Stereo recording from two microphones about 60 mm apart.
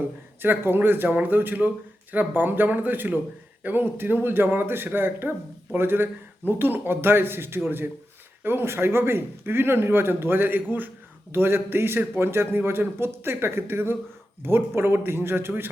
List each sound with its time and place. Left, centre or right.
0.4 s speech: right